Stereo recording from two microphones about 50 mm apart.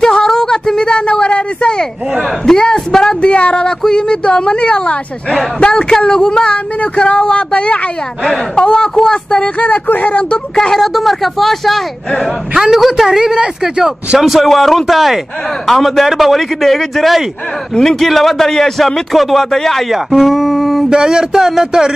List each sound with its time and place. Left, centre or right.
0.0 s a sound: centre
2.4 s speech: centre
9.6 s speech: left
10.3 s speech: centre
10.8 s a man's voice: centre
12.5 s a man's voice: centre
20.1 s a sound: centre
20.9 s speech: centre